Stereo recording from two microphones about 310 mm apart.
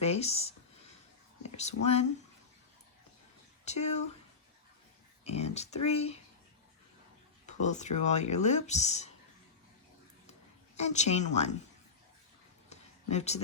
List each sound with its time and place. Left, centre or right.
0.0 s speech: centre
1.8 s speech: left
3.7 s speech: left
5.2 s speech: centre
7.4 s speech: left
10.8 s speech: left
12.7 s a sound: left